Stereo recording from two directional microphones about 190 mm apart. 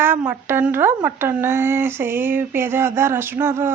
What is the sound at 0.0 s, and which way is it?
Speech, 10° right (ahead or behind).